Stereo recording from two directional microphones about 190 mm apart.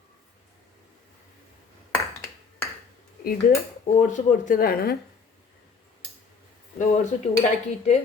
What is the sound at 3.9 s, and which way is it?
Speech, 40° left (ahead or behind).